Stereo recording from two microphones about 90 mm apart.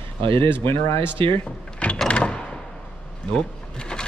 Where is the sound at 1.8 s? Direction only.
15° left (ahead or behind).